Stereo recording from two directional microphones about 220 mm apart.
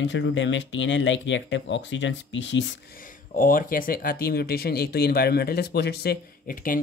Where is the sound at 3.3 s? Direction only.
40° left (ahead or behind).